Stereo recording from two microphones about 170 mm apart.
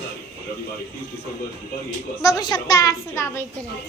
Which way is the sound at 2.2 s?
20° left (ahead or behind).